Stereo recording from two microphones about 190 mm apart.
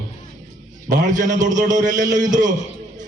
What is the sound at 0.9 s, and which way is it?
A man's voice, 45° right (ahead or behind).